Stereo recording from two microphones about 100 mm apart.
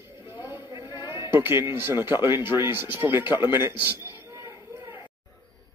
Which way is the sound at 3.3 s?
50° left (ahead or behind).